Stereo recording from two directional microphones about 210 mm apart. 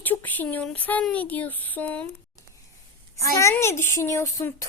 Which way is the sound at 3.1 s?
15° left (ahead or behind).